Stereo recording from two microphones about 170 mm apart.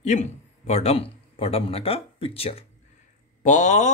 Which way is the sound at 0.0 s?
45° left (ahead or behind).